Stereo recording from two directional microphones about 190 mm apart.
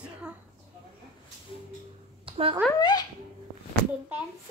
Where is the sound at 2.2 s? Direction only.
30° right (ahead or behind).